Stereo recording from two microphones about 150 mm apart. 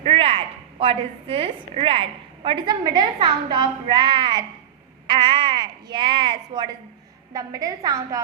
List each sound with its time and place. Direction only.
0.0 s a woman's voice: 40° right (ahead or behind); by 8.2 s 25° right (ahead or behind)